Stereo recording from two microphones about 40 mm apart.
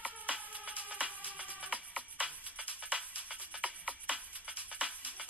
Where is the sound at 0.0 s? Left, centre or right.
Right.